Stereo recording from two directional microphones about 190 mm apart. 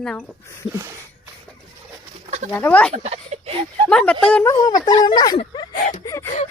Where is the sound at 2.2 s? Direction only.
35° right (ahead or behind).